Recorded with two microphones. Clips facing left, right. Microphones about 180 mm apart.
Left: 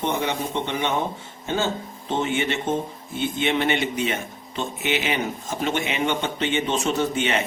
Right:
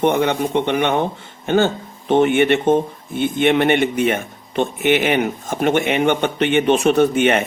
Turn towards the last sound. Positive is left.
turn(degrees=-55)  # may be behind; listen again after turning